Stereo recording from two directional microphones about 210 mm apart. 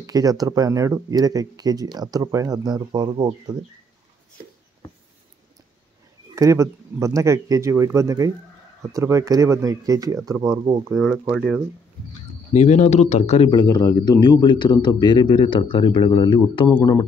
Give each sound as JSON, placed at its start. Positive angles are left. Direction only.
{"t": 0.0, "sound": "speech", "side_deg": -15}
{"t": 6.3, "sound": "speech", "side_deg": -15}
{"t": 11.0, "sound": "speech", "side_deg": 0}
{"t": 12.5, "sound": "speech", "side_deg": 35}